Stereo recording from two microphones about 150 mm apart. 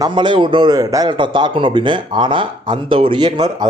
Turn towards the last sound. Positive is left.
turn(degrees=-30)  # may be behind; listen again after turning